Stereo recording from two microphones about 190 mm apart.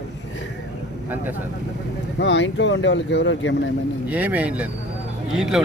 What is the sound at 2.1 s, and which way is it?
Speech, 70° left (ahead or behind).